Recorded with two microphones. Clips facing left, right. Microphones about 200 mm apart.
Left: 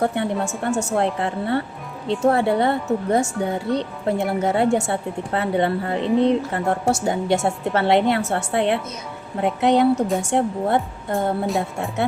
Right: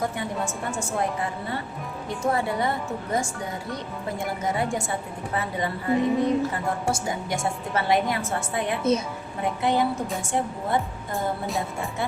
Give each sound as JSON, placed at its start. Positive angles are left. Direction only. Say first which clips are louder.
{"t": 0.0, "sound": "speech", "louder": "left 6 dB", "side_deg": 65}
{"t": 11.4, "sound": "speech", "louder": "left 5 dB", "side_deg": 0}